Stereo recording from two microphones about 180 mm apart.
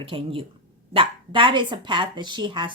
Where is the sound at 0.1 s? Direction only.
30° right (ahead or behind).